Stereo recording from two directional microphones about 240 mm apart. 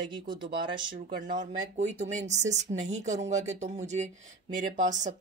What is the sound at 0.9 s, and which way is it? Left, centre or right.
Speech, right.